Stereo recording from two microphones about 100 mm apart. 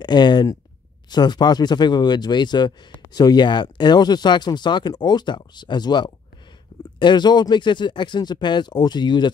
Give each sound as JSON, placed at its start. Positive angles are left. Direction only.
{"t": 0.0, "sound": "speech", "side_deg": 50}